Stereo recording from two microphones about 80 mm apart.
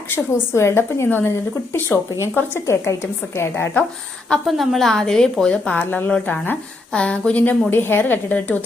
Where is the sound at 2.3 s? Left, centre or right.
Left.